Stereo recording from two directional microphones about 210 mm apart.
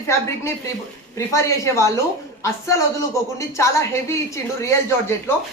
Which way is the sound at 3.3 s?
15° left (ahead or behind).